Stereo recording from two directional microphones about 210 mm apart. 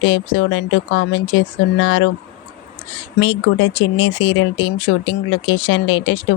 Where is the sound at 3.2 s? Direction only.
65° left (ahead or behind).